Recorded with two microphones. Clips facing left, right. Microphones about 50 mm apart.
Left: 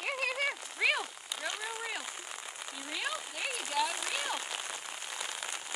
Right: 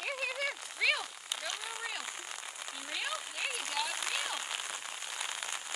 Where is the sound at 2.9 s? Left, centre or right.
Centre.